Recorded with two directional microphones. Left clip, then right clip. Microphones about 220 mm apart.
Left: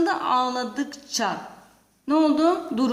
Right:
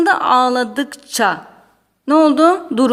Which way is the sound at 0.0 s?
40° right (ahead or behind).